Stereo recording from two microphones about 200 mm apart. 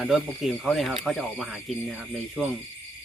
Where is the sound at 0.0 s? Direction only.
Centre (ahead or behind).